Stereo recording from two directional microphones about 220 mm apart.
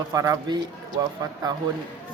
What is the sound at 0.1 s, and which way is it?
Speech, 15° right (ahead or behind).